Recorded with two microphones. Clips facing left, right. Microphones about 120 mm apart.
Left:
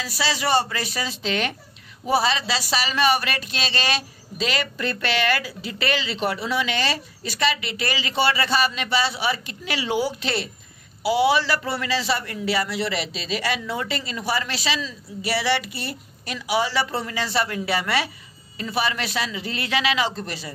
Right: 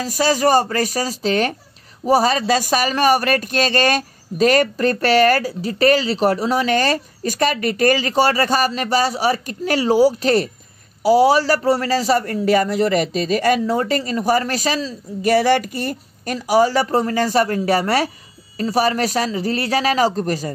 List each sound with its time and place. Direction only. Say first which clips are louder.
0.0 s a man's voice: right 9 dB; 45° right (ahead or behind)